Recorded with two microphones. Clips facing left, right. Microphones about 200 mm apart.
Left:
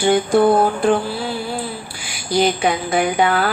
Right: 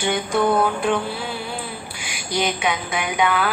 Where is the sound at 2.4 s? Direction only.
35° left (ahead or behind).